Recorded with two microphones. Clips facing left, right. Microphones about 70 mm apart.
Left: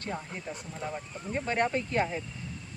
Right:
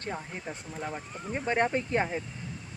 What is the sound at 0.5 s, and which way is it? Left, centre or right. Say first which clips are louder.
Speech: left 1 dB; right.